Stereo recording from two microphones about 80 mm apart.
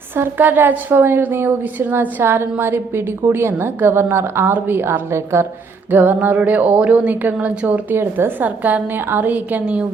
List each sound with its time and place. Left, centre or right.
0.2 s a woman's voice: right
5.9 s a woman's voice: right
7.9 s a woman's voice: right
8.4 s a woman's voice: right